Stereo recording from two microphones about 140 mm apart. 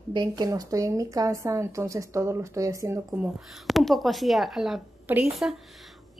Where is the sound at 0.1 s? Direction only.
30° right (ahead or behind).